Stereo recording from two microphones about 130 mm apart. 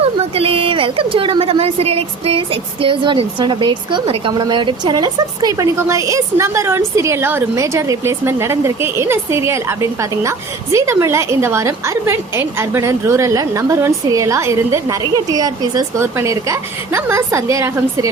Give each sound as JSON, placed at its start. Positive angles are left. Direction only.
{"t": 0.0, "sound": "a woman's voice", "side_deg": -50}